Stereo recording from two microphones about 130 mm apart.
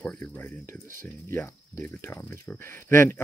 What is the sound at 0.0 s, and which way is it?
Speech, 10° left (ahead or behind).